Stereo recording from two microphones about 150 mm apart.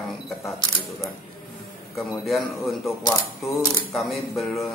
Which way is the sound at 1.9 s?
Centre (ahead or behind).